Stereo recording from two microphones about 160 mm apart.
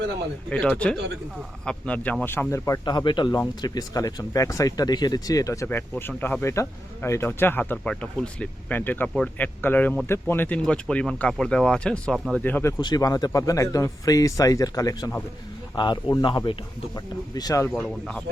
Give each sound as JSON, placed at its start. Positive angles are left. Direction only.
{"t": 0.5, "sound": "speech", "side_deg": 5}
{"t": 12.8, "sound": "speech", "side_deg": 25}
{"t": 17.8, "sound": "speech", "side_deg": 0}